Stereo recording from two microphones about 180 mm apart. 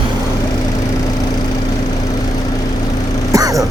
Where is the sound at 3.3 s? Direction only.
20° right (ahead or behind).